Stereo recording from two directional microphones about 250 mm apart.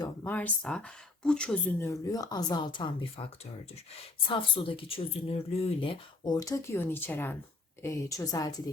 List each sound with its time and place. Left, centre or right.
0.0 s speech: centre
4.3 s speech: centre